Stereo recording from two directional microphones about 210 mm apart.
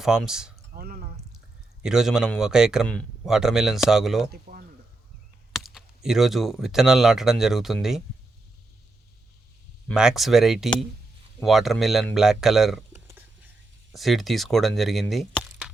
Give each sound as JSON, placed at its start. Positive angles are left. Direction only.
{"t": 0.0, "sound": "speech", "side_deg": 0}
{"t": 0.8, "sound": "drip", "side_deg": -45}
{"t": 1.8, "sound": "speech", "side_deg": 0}
{"t": 4.3, "sound": "chink", "side_deg": -45}
{"t": 5.5, "sound": "speech", "side_deg": 0}
{"t": 9.9, "sound": "speech", "side_deg": -5}
{"t": 12.9, "sound": "a sound", "side_deg": -10}
{"t": 13.9, "sound": "speech", "side_deg": 0}